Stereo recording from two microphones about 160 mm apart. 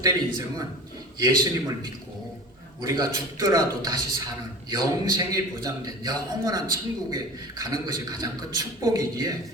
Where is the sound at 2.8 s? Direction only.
25° right (ahead or behind).